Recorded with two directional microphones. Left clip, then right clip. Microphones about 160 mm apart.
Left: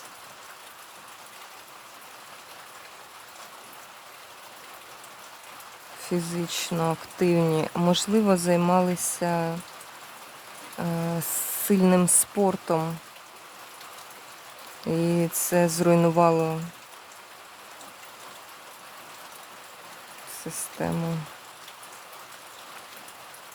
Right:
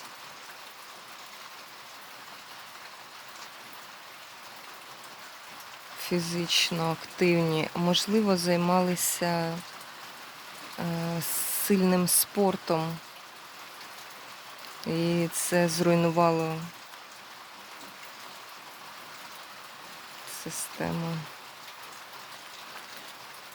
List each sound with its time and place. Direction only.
6.1 s speech: 15° left (ahead or behind)
10.8 s speech: 10° left (ahead or behind)
14.8 s speech: 15° left (ahead or behind)
20.4 s speech: 15° left (ahead or behind)